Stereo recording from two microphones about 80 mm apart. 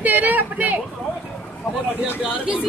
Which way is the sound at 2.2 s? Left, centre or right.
Centre.